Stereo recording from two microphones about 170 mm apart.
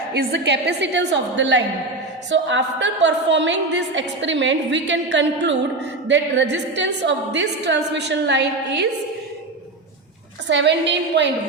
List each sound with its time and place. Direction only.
0.1 s a woman's voice: 80° right
10.5 s a woman's voice: 90° right